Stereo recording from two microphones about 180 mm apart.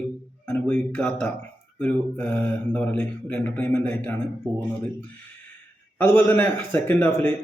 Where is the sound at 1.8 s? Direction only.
10° left (ahead or behind).